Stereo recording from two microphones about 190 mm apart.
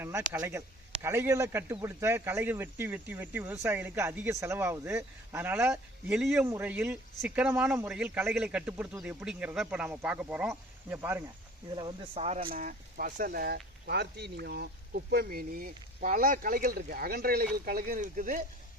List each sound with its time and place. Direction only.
0.0 s speech: 15° right (ahead or behind)
11.7 s speech: 25° right (ahead or behind)
12.4 s speech: 50° right (ahead or behind)